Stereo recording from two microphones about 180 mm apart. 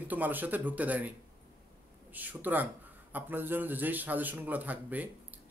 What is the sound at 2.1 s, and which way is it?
Speech, 10° right (ahead or behind).